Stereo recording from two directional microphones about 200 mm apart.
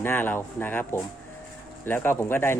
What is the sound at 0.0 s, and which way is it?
Speech, 10° left (ahead or behind).